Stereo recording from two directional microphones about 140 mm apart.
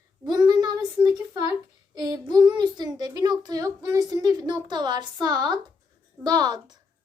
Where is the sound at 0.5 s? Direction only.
30° right (ahead or behind).